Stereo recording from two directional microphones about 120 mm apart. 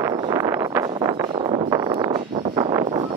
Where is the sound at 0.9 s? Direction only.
40° right (ahead or behind).